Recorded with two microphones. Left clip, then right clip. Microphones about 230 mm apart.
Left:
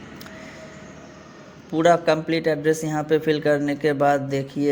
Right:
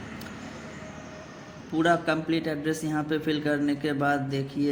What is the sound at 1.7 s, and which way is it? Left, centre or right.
A man's voice, left.